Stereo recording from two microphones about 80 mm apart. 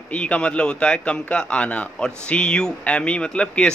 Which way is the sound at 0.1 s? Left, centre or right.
Centre.